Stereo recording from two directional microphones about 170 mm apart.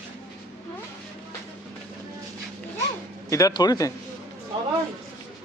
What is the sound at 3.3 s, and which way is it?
Speech, 20° left (ahead or behind).